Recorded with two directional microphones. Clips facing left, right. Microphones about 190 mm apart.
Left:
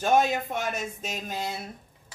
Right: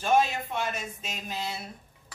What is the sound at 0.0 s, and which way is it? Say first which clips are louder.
Speech: left 2 dB; 45° left (ahead or behind).